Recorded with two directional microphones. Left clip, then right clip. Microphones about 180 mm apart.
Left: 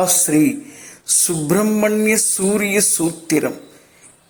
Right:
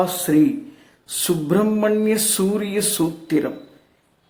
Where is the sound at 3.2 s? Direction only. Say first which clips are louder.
Left 4 dB; 25° left (ahead or behind).